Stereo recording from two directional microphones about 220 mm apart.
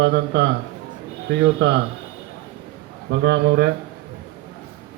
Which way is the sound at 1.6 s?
55° right (ahead or behind).